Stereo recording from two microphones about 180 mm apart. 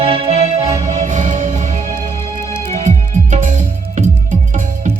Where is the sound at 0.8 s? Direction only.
40° right (ahead or behind).